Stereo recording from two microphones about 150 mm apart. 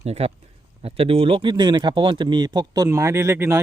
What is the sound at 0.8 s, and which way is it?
Speech, 40° right (ahead or behind).